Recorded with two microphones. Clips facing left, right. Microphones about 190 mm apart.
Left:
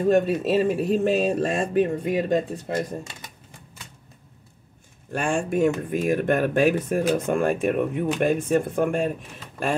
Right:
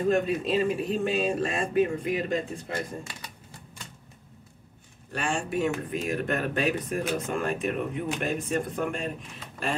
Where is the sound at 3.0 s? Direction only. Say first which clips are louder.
Left 2 dB; 20° left (ahead or behind).